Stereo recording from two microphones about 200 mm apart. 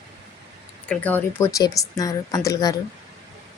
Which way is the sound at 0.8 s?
5° left (ahead or behind).